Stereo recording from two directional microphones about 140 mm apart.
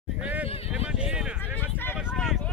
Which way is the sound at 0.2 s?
10° right (ahead or behind).